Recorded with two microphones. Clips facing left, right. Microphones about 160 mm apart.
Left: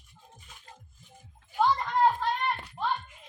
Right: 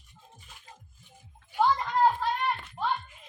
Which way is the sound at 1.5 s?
Centre (ahead or behind).